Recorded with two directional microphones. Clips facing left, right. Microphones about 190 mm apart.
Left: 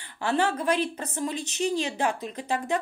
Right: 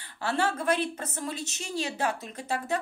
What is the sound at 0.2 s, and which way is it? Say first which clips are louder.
Speech: left 3 dB; 45° right (ahead or behind).